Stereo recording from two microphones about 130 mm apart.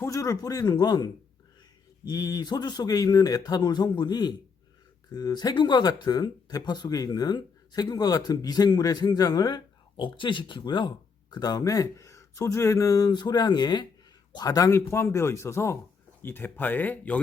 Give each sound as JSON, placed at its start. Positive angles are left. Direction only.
{"t": 0.0, "sound": "speech", "side_deg": 25}